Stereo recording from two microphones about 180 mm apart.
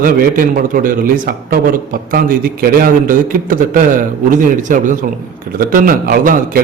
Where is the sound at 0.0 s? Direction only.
50° right (ahead or behind).